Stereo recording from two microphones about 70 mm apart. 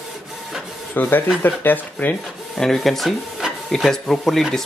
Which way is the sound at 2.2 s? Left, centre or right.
Centre.